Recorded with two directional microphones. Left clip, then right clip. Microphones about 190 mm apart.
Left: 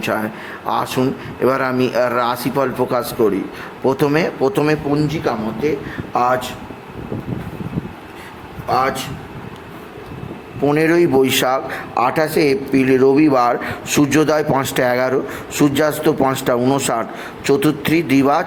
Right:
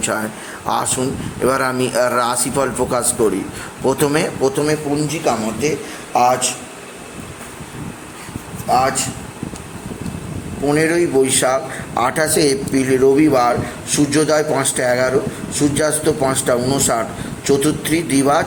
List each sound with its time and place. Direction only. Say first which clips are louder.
0.0 s speech: left 1 dB; centre (ahead or behind)
4.5 s a man's voice: left 1 dB; 15° left (ahead or behind)
6.1 s speech: right 2 dB; centre (ahead or behind)
10.7 s a man's voice: left 1 dB; 20° left (ahead or behind)
11.9 s a man's voice: even; centre (ahead or behind); by 18.4 s 15° left (ahead or behind)